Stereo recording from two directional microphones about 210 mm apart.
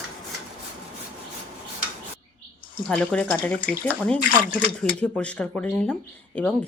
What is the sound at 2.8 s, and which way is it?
Speech, 5° left (ahead or behind).